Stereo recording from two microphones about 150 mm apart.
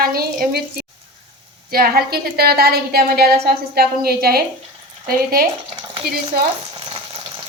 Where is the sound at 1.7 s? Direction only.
85° right.